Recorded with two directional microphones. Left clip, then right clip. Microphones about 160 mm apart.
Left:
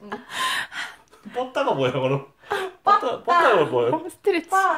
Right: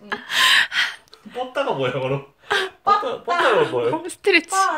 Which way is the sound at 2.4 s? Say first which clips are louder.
Right 6 dB; 10° right (ahead or behind).